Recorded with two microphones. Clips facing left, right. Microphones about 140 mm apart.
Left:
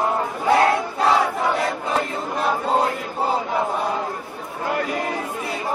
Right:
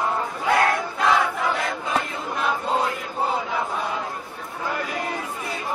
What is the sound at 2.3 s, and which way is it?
Chant, 35° left (ahead or behind).